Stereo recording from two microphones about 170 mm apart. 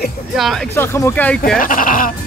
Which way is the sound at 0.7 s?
15° left (ahead or behind).